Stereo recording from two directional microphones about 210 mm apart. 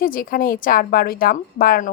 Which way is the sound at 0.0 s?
40° left (ahead or behind).